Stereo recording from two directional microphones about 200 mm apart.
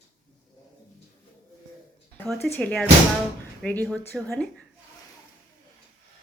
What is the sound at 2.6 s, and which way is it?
A woman's voice, 5° left (ahead or behind).